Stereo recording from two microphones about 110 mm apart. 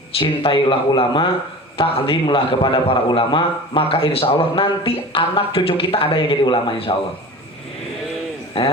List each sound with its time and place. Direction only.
0.2 s a man's voice: 50° left (ahead or behind)
8.6 s a man's voice: 55° left (ahead or behind)